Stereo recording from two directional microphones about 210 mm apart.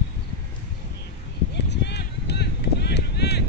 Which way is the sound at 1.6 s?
55° left (ahead or behind).